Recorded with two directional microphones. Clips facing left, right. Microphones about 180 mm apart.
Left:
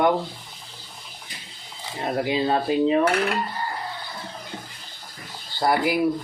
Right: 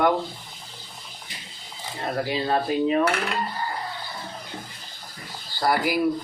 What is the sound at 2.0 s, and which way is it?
Speech, 20° left (ahead or behind).